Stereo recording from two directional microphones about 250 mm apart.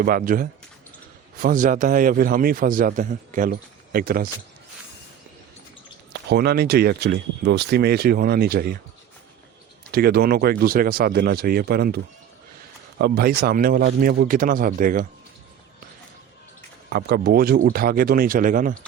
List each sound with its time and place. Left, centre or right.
0.0 s a man's voice: right
6.2 s a man's voice: right
9.9 s a man's voice: right
13.0 s a man's voice: right
16.9 s a man's voice: right